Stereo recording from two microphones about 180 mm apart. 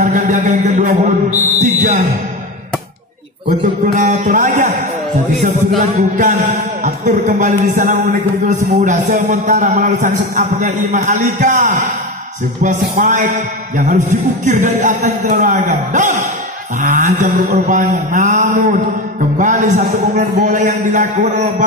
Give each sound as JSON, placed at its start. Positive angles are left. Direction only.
{"t": 0.0, "sound": "a sound", "side_deg": -45}
{"t": 1.8, "sound": "music", "side_deg": -40}
{"t": 3.8, "sound": "music", "side_deg": -45}
{"t": 5.9, "sound": "speech", "side_deg": -45}
{"t": 8.7, "sound": "music", "side_deg": -45}
{"t": 9.6, "sound": "speech", "side_deg": -45}